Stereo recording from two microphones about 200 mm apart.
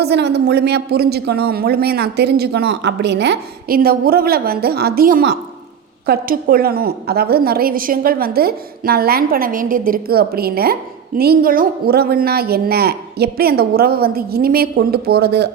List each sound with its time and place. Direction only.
0.0 s a woman's voice: 55° right (ahead or behind)